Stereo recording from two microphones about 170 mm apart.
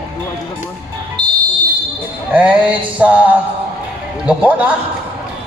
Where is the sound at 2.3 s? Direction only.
10° right (ahead or behind).